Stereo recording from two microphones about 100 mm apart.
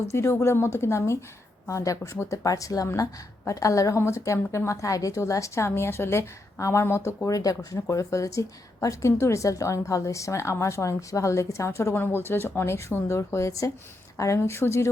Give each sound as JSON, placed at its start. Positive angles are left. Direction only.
{"t": 0.1, "sound": "a woman's voice", "side_deg": 25}